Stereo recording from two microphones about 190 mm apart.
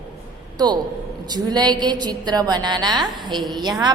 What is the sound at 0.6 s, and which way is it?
A woman's voice, 20° right (ahead or behind).